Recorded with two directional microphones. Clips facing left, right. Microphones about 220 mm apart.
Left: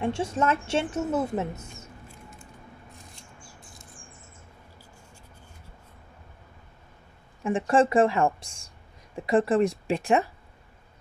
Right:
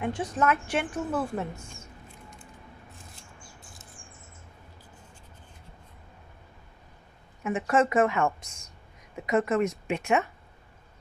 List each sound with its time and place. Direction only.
0.0 s a woman's voice: 25° left (ahead or behind)
7.4 s a woman's voice: 30° left (ahead or behind)